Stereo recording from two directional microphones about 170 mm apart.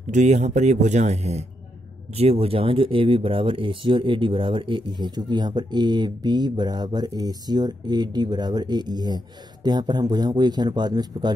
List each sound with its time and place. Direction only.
0.1 s speech: 45° right (ahead or behind); by 11.3 s 25° right (ahead or behind)